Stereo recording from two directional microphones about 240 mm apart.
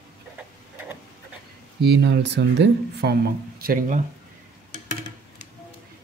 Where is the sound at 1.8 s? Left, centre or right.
Right.